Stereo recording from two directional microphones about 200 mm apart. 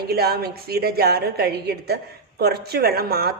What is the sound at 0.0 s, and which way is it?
A woman's voice, 50° right (ahead or behind).